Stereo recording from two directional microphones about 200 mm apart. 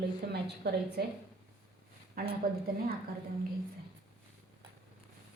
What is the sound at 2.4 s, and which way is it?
Speech, 45° right (ahead or behind).